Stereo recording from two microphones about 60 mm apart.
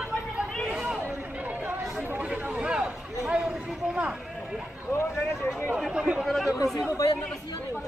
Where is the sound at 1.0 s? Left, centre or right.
Right.